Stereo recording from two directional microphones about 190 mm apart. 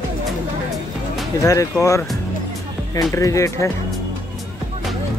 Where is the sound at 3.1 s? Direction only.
15° left (ahead or behind).